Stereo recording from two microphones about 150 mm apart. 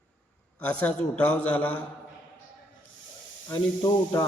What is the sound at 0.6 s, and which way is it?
A man's voice, 10° left (ahead or behind).